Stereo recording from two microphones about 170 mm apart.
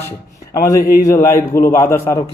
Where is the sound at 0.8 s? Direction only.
65° left (ahead or behind).